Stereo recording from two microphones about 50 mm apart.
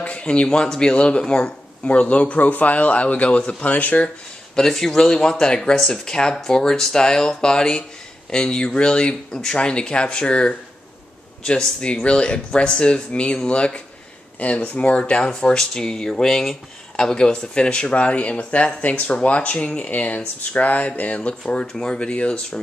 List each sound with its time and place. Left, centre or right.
0.0 s speech: left
4.6 s speech: centre
15.2 s speech: centre